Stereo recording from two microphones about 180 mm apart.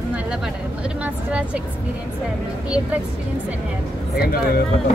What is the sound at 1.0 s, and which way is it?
Speech, 10° right (ahead or behind).